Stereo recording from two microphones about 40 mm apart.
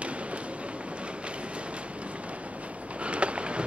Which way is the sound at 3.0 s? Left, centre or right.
Right.